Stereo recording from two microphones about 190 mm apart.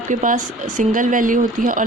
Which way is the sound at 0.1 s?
40° right (ahead or behind).